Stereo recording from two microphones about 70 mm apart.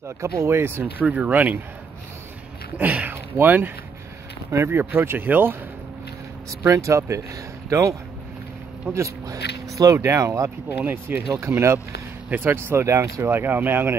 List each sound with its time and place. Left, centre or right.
0.2 s speech: right
0.6 s speech: right
1.0 s speech: centre
2.8 s speech: right
6.7 s speech: right
8.9 s speech: right
10.7 s speech: right
13.3 s speech: right